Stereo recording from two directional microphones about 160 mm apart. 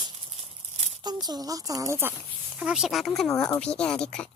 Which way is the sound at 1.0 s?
25° right (ahead or behind).